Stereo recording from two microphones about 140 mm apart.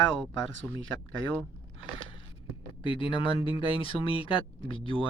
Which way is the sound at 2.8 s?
40° left (ahead or behind).